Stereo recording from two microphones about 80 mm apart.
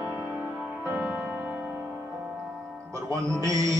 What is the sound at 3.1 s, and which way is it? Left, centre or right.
Music, right.